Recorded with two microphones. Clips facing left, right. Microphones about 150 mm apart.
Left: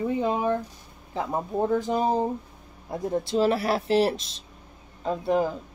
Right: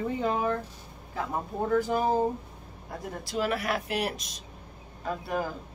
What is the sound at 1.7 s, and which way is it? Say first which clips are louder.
Speech: right 1 dB; 20° left (ahead or behind).